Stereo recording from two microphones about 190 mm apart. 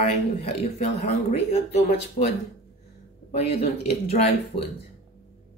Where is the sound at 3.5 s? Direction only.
35° left (ahead or behind).